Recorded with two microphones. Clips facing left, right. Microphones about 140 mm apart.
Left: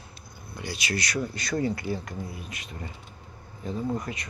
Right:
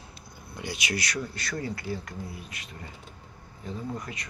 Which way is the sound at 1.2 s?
15° left (ahead or behind).